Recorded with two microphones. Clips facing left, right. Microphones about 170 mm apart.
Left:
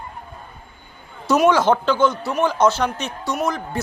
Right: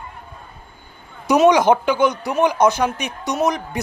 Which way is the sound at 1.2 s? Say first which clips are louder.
Right 2 dB; 20° right (ahead or behind).